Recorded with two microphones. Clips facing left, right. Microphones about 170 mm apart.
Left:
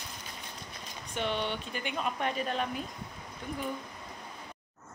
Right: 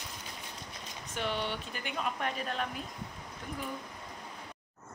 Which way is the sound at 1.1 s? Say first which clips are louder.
Left 2 dB; 5° right (ahead or behind).